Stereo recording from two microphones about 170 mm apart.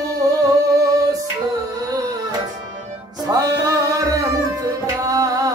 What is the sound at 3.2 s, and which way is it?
Music, 20° right (ahead or behind).